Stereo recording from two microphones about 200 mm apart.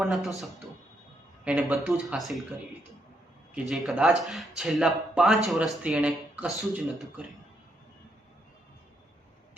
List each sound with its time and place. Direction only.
0.0 s speech: centre (ahead or behind)
3.5 s speech: centre (ahead or behind)